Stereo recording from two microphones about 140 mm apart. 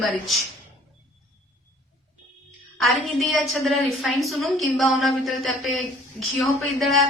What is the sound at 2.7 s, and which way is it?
A woman's voice, centre (ahead or behind).